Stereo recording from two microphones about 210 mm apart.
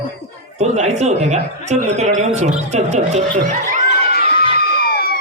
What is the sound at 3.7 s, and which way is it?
Crowd, 45° left (ahead or behind).